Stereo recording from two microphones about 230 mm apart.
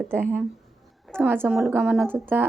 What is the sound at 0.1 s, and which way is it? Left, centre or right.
A child's voice, centre.